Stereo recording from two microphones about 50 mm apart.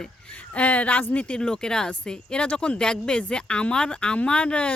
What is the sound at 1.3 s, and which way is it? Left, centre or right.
Speech, centre.